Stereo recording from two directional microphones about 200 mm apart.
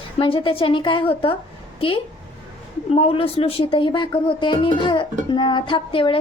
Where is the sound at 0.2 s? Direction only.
25° left (ahead or behind).